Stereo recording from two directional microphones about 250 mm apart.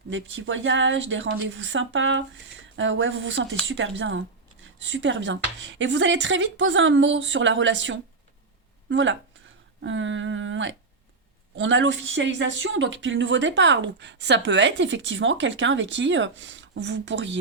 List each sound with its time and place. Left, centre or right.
0.1 s speech: right
9.8 s a sound: right
11.5 s speech: right